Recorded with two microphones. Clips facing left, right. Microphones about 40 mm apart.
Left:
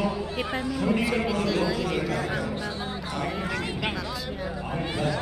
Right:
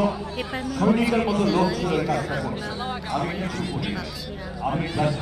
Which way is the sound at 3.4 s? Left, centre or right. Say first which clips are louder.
Even; left.